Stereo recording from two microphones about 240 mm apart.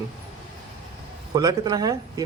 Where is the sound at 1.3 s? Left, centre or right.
Centre.